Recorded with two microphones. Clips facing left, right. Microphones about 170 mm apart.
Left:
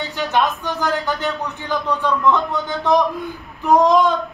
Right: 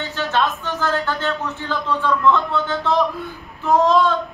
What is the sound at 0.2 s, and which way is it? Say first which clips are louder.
Speech: left 2 dB; 15° left (ahead or behind).